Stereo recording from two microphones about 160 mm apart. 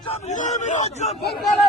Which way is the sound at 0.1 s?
50° left (ahead or behind).